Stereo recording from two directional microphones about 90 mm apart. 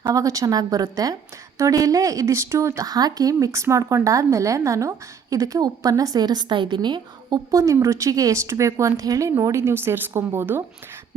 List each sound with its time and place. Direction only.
0.0 s a woman's voice: 40° right (ahead or behind); by 7.3 s 60° right (ahead or behind)
7.5 s speech: 35° right (ahead or behind)